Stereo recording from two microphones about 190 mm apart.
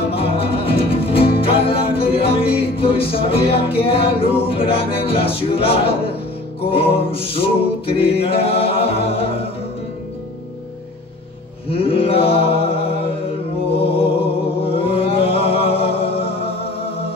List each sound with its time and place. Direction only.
0.1 s music: 30° left (ahead or behind)
8.0 s a capella: 30° left (ahead or behind)
11.7 s mantra: 30° left (ahead or behind)
13.7 s music: 30° left (ahead or behind)
14.6 s chant: 30° left (ahead or behind)